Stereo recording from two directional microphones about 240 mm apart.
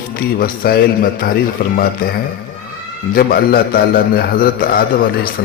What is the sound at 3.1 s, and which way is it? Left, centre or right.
A man's voice, left.